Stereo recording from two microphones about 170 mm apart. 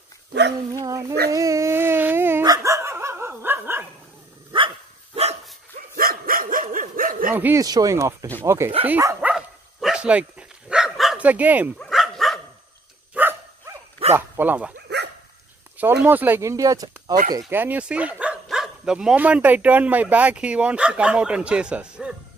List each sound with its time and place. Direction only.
0.7 s speech: 20° right (ahead or behind)
1.3 s dog: 20° right (ahead or behind)
4.5 s dog: 30° right (ahead or behind)
5.9 s dog: 60° right (ahead or behind)
7.3 s speech: 10° right (ahead or behind)
8.8 s dog: 10° right (ahead or behind)
13.1 s dog: 10° right (ahead or behind)
14.1 s speech: 15° right (ahead or behind)
15.8 s speech: 10° right (ahead or behind)